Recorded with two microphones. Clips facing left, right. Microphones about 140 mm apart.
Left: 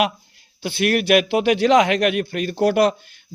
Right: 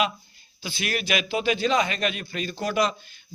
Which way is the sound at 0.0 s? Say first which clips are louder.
Left 5 dB; 65° left (ahead or behind).